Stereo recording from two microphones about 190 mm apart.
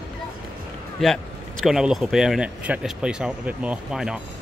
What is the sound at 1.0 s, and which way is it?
Speech, 5° left (ahead or behind).